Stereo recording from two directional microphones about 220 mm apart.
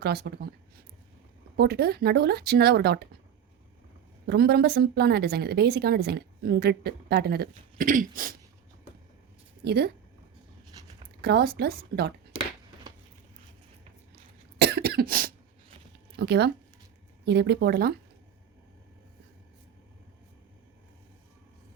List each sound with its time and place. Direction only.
0.0 s a woman's voice: 45° right (ahead or behind)
1.5 s a woman's voice: 45° right (ahead or behind)
4.3 s a woman's voice: 45° right (ahead or behind)
9.6 s a woman's voice: 50° right (ahead or behind)
11.2 s a woman's voice: 45° right (ahead or behind)
14.6 s cough: 45° right (ahead or behind)
16.1 s a woman's voice: 50° right (ahead or behind)